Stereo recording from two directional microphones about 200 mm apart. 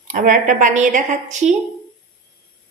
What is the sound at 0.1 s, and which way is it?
A woman's voice, 40° right (ahead or behind).